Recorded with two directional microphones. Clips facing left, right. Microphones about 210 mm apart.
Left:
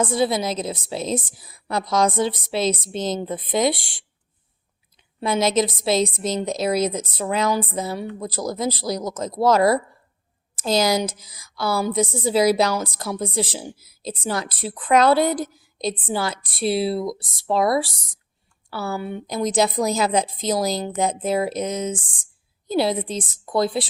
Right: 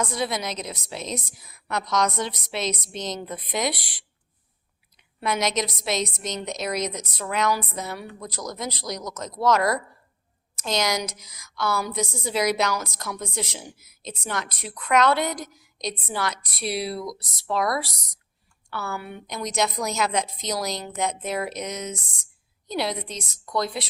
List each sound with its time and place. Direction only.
0.0 s a woman's voice: 30° left (ahead or behind)
5.2 s a woman's voice: 30° left (ahead or behind)
17.8 s a woman's voice: centre (ahead or behind)
18.7 s a woman's voice: 30° left (ahead or behind)